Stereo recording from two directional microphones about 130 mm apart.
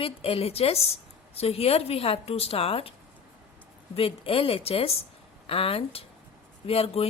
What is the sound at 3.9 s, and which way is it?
A woman's voice, 45° left (ahead or behind).